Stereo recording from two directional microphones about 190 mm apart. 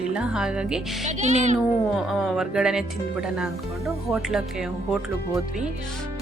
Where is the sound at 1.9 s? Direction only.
Centre (ahead or behind).